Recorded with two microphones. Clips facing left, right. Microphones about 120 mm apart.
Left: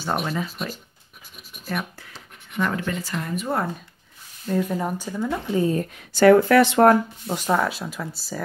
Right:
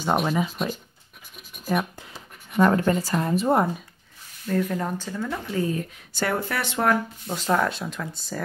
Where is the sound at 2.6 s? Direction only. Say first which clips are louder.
Right 6 dB; 40° right (ahead or behind).